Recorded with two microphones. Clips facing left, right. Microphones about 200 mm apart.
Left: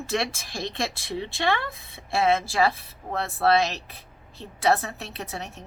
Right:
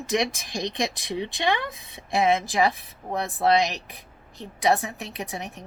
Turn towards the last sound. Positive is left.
turn(degrees=-15)  # may be behind; listen again after turning